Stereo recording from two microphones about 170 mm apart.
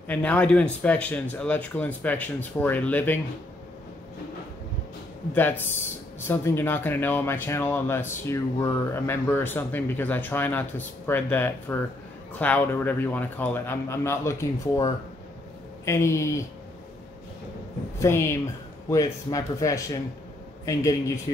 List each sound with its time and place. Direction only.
0.1 s speech: 10° left (ahead or behind)
5.3 s speech: 10° left (ahead or behind)
17.9 s speech: 15° left (ahead or behind)